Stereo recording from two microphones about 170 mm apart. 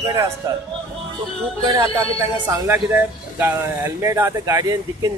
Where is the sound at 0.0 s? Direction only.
20° right (ahead or behind).